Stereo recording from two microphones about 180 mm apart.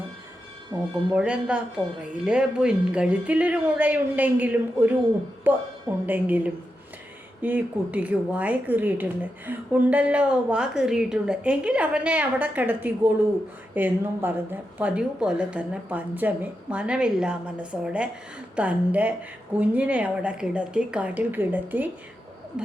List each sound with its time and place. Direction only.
1.1 s speech: 5° right (ahead or behind)